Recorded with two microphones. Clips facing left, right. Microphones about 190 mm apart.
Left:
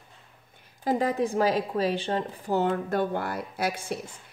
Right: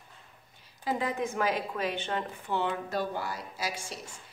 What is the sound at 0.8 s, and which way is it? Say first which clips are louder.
A woman's voice: left 6 dB; 40° left (ahead or behind).